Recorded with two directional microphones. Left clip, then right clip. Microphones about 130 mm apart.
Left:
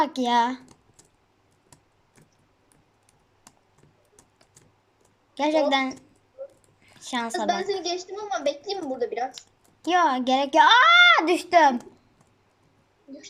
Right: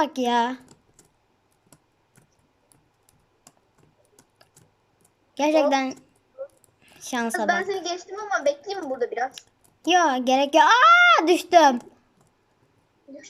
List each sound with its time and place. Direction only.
0.0 s speech: 10° right (ahead or behind)
5.3 s a woman's voice: 15° right (ahead or behind)
6.8 s a sound: 15° right (ahead or behind)
7.4 s a child's voice: 10° left (ahead or behind)
9.4 s a woman's voice: 20° right (ahead or behind)